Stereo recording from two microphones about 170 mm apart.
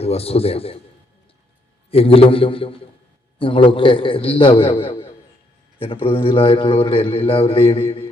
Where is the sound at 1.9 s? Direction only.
35° left (ahead or behind).